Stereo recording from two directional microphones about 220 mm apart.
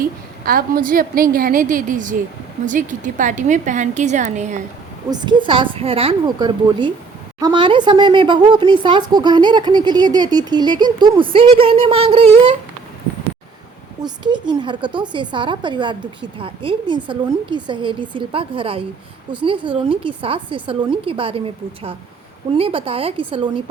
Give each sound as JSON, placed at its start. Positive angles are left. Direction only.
{"t": 0.4, "sound": "a woman's voice", "side_deg": -40}
{"t": 5.1, "sound": "a woman's voice", "side_deg": -20}
{"t": 14.0, "sound": "a woman's voice", "side_deg": -20}